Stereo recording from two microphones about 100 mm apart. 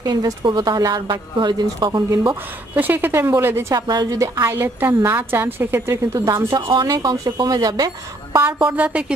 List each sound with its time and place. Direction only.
0.0 s speech: 40° right (ahead or behind)
2.7 s a woman's voice: 20° right (ahead or behind)
3.7 s a woman's voice: 40° right (ahead or behind)
6.7 s speech: 45° right (ahead or behind)
8.6 s a woman's voice: 15° right (ahead or behind)